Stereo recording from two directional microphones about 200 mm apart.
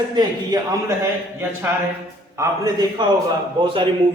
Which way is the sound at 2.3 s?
20° right (ahead or behind).